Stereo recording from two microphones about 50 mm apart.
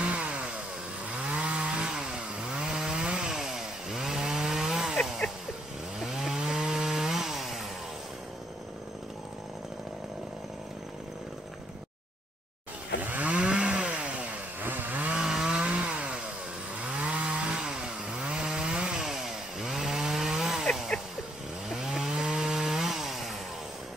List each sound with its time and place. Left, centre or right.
0.0 s chainsaw: right
5.9 s chainsaw: centre
13.0 s chainsaw: right
14.6 s chainsaw: right
15.1 s chainsaw: centre
21.6 s chainsaw: centre